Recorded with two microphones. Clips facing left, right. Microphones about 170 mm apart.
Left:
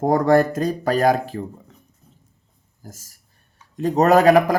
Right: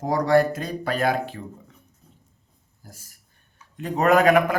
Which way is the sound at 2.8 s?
40° left (ahead or behind).